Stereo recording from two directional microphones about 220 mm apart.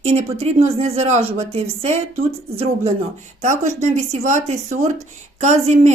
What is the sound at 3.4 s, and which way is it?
Speech, 35° right (ahead or behind).